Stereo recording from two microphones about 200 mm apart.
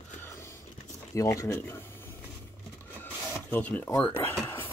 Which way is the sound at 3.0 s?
10° left (ahead or behind).